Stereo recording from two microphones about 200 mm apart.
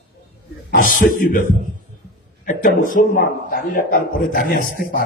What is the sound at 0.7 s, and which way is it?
A man's voice, 45° left (ahead or behind).